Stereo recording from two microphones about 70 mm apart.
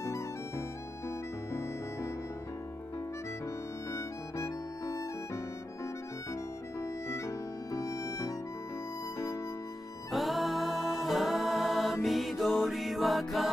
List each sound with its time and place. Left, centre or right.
0.0 s music: left
3.9 s music: left
6.8 s music: left
10.1 s music: centre